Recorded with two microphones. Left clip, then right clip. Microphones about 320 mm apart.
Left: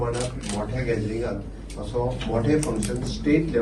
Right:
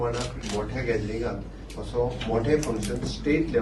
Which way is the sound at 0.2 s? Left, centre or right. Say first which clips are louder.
Left 1 dB; left.